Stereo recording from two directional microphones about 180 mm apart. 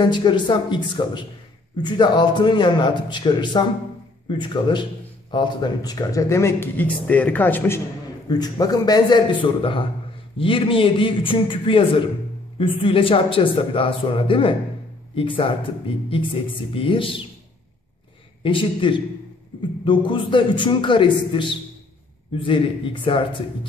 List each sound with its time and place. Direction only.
0.0 s a man's voice: 25° left (ahead or behind)
8.3 s a man's voice: 20° left (ahead or behind)
16.7 s a man's voice: 30° left (ahead or behind)
18.4 s a man's voice: 30° left (ahead or behind)